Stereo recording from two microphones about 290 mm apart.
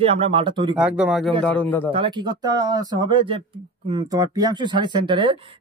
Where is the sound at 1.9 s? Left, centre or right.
Centre.